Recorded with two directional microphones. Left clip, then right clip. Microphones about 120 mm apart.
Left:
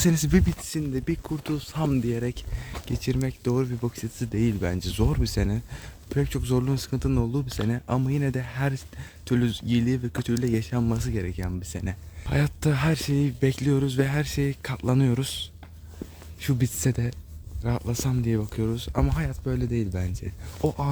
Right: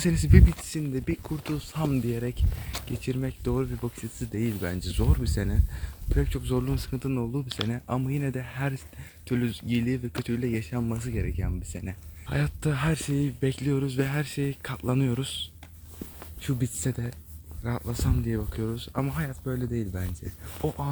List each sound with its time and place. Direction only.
0.0 s speech: 35° left (ahead or behind)
1.5 s speech: 45° left (ahead or behind)
3.0 s speech: 30° left (ahead or behind)
4.3 s speech: 45° left (ahead or behind); by 10.7 s 30° left (ahead or behind)
10.7 s speech: 40° left (ahead or behind)
16.4 s speech: 45° left (ahead or behind)
16.8 s speech: 65° left (ahead or behind)
17.6 s speech: 30° left (ahead or behind)
20.6 s speech: 55° left (ahead or behind)